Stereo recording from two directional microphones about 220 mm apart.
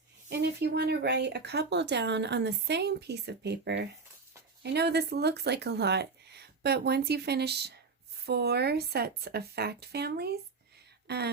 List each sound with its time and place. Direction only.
0.3 s speech: 50° right (ahead or behind)